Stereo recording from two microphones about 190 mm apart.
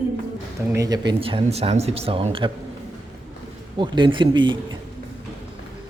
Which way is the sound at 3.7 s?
25° right (ahead or behind).